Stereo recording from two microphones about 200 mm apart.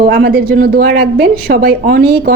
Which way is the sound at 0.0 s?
50° right (ahead or behind).